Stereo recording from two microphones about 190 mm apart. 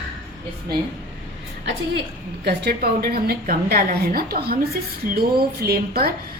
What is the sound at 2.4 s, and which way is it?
A woman's voice, 55° right (ahead or behind).